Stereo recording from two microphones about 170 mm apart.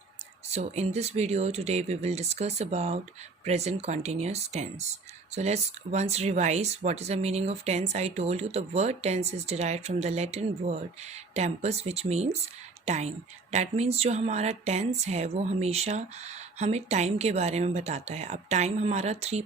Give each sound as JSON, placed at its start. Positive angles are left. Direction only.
{"t": 0.4, "sound": "speech", "side_deg": -40}